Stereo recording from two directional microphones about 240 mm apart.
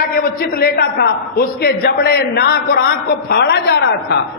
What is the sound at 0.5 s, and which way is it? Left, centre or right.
A man's voice, left.